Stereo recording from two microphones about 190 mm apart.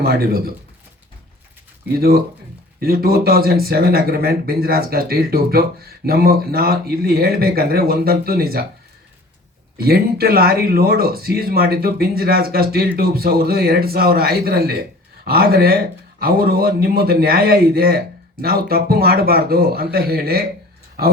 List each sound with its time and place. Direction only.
0.0 s speech: 55° right (ahead or behind)
2.0 s speech: 50° right (ahead or behind)
9.7 s speech: 55° right (ahead or behind)